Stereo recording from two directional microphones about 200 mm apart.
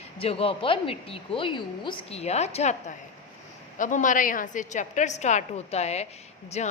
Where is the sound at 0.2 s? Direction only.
30° left (ahead or behind).